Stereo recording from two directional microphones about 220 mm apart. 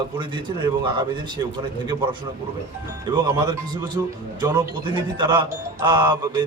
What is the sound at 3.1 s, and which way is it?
Speech, 15° right (ahead or behind).